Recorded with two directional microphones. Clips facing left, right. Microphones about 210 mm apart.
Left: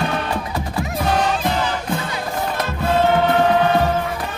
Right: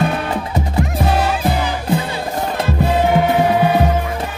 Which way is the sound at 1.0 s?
5° right (ahead or behind).